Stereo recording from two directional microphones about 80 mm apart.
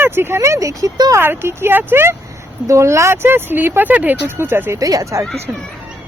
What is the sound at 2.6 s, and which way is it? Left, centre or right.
Speech, right.